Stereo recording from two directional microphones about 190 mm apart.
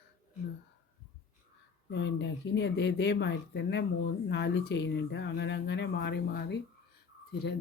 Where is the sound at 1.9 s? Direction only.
70° left (ahead or behind).